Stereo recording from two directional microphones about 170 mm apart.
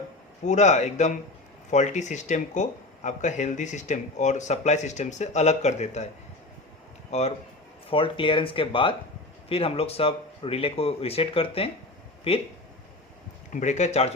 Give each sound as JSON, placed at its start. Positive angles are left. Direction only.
{"t": 0.4, "sound": "speech", "side_deg": 45}
{"t": 7.1, "sound": "speech", "side_deg": 40}
{"t": 13.5, "sound": "speech", "side_deg": 45}